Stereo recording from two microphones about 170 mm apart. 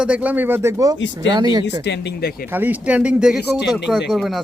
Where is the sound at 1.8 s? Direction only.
85° left.